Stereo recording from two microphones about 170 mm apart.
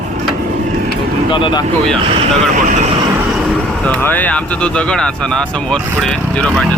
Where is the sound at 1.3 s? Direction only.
30° left (ahead or behind).